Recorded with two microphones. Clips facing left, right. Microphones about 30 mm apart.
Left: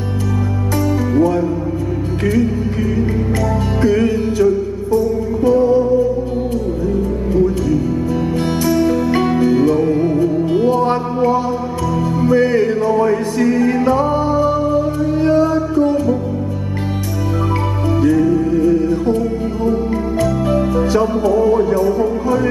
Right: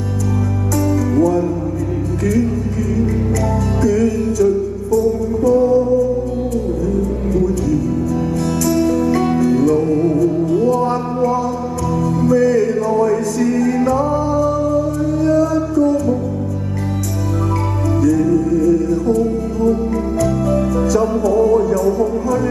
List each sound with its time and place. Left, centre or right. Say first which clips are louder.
0.8 s music: even; left
3.8 s music: left 1 dB; left
18.0 s music: left 1 dB; left